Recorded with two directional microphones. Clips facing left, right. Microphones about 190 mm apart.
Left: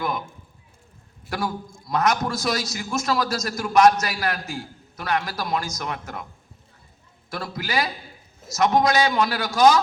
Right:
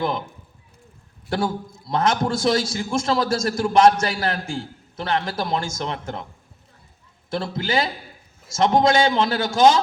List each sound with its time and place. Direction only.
0.0 s a man's voice: 25° right (ahead or behind)
1.3 s a man's voice: 30° right (ahead or behind)
7.3 s a man's voice: 25° right (ahead or behind)